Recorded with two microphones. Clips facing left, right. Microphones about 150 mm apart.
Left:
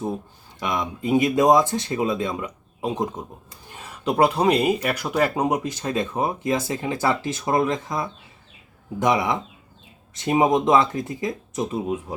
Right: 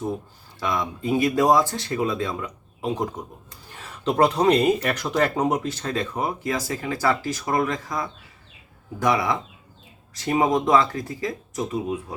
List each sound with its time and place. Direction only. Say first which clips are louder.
0.6 s speech: even; 20° left (ahead or behind)